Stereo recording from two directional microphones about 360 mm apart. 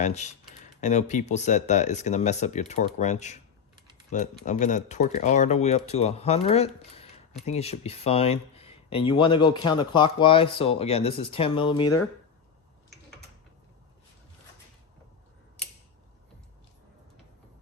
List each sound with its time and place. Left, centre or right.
0.0 s speech: centre